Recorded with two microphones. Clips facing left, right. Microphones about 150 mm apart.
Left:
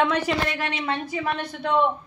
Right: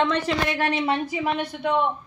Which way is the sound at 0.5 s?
35° right (ahead or behind).